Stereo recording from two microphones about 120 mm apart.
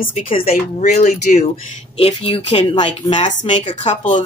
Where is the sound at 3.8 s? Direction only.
90° left.